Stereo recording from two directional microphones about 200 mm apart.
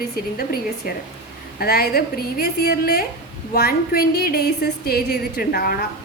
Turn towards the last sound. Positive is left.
turn(degrees=50)  # may be behind; listen again after turning